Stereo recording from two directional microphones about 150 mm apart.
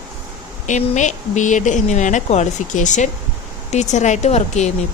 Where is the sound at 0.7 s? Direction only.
55° left (ahead or behind).